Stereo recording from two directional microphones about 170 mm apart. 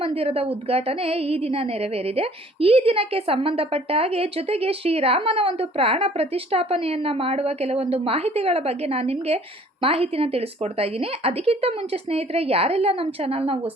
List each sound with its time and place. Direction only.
0.0 s a woman's voice: 35° right (ahead or behind)